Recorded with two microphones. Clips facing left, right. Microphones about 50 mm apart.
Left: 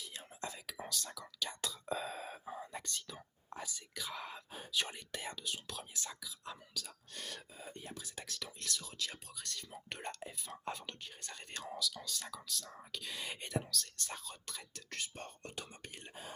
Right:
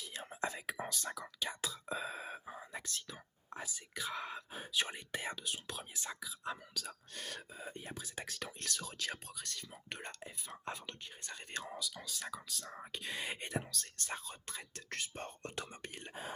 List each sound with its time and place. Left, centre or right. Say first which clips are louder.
0.0 s whispering: right 5 dB; right
1.4 s whispering: left 3 dB; centre
3.6 s speech: right 1 dB; centre
4.0 s speech: right 4 dB; centre; by 6.6 s right
7.1 s whispering: right 2 dB; centre
7.9 s speech: right 2 dB; right
8.5 s speech: even; right
9.4 s speech: even; right
9.7 s speech: left 5 dB; centre; by 14.8 s right
14.8 s speech: right 2 dB; right